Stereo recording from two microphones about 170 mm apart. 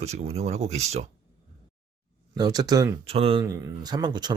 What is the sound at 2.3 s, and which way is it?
Speech, 25° right (ahead or behind).